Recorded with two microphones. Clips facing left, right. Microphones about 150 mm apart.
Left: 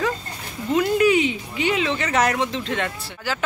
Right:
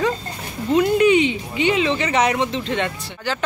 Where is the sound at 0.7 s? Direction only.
Centre (ahead or behind).